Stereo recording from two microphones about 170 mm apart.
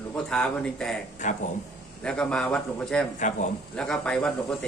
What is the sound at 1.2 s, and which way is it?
Speech, 45° left (ahead or behind).